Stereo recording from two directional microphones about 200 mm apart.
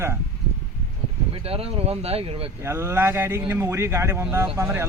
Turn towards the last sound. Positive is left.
turn(degrees=-10)  # may be behind; listen again after turning